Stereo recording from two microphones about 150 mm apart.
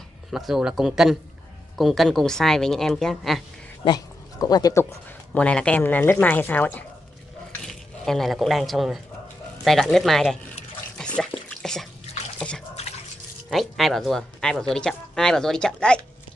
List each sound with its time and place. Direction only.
0.3 s speech: centre (ahead or behind)
3.8 s speech: 25° left (ahead or behind)
5.3 s speech: 5° left (ahead or behind)
11.0 s a sound: 5° left (ahead or behind)
11.4 s drip: 5° left (ahead or behind)
13.5 s speech: centre (ahead or behind)